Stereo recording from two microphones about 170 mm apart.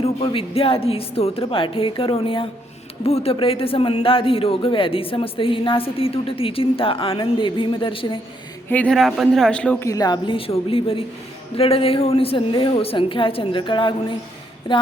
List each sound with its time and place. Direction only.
0.0 s a man's voice: 35° left (ahead or behind)
8.7 s speech: 5° left (ahead or behind)
9.8 s a man's voice: 20° left (ahead or behind)